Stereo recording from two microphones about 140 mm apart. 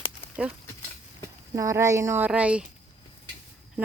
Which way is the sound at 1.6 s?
20° right (ahead or behind).